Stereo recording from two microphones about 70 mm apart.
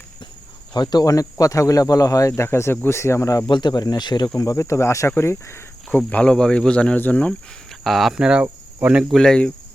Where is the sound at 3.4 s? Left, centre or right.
Left.